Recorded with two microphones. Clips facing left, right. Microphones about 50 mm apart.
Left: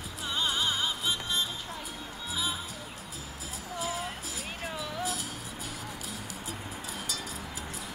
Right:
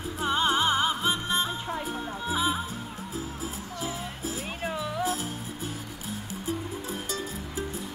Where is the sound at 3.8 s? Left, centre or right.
Right.